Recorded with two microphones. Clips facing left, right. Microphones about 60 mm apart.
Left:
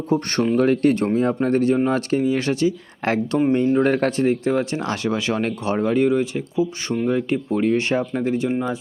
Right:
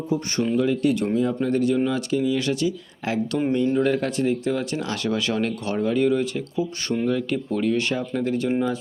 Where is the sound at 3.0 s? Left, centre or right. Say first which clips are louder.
Left 4 dB; left.